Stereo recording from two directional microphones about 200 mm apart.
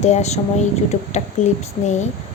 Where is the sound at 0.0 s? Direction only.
35° left (ahead or behind).